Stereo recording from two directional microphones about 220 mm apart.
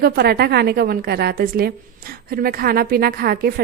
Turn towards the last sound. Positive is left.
turn(degrees=-45)  # may be behind; listen again after turning